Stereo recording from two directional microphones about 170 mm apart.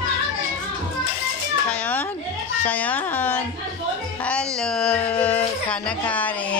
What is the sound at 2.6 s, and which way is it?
Speech, 10° left (ahead or behind).